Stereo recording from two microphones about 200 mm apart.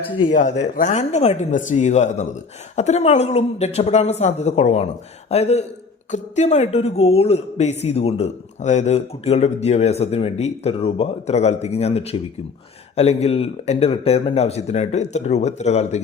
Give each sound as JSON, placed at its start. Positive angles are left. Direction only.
{"t": 0.3, "sound": "speech", "side_deg": 35}